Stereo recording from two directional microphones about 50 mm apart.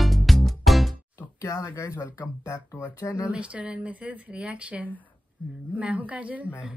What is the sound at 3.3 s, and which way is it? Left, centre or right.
Speech, right.